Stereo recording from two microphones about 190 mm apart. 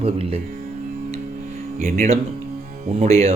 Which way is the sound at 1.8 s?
35° right (ahead or behind).